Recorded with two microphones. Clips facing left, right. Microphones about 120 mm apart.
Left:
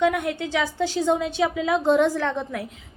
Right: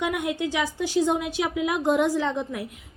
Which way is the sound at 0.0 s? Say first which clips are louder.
Left 4 dB; 15° right (ahead or behind).